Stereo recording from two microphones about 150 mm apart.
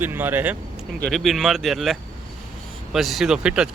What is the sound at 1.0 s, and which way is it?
Speech, centre (ahead or behind).